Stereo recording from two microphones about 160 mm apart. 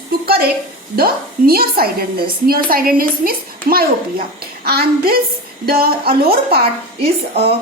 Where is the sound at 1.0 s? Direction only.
70° right (ahead or behind).